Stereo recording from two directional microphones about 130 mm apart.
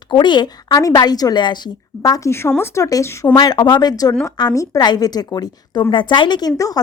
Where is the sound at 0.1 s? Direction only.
35° left (ahead or behind).